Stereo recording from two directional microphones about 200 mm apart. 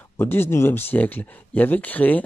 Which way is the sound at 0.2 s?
10° left (ahead or behind).